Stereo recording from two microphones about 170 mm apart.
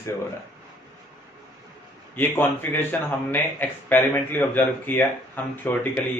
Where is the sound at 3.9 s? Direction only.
10° left (ahead or behind).